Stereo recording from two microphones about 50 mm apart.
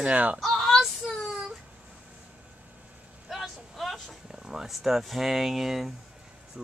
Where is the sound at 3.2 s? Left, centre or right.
Centre.